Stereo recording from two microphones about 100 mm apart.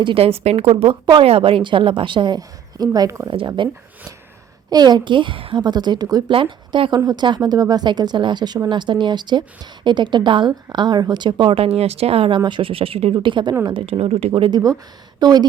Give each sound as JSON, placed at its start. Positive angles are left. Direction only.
{"t": 0.0, "sound": "speech", "side_deg": -70}
{"t": 3.3, "sound": "speech", "side_deg": -55}
{"t": 4.7, "sound": "speech", "side_deg": -45}
{"t": 6.3, "sound": "speech", "side_deg": -55}
{"t": 12.5, "sound": "speech", "side_deg": -60}
{"t": 13.1, "sound": "speech", "side_deg": -50}
{"t": 13.8, "sound": "speech", "side_deg": -85}
{"t": 14.5, "sound": "speech", "side_deg": -35}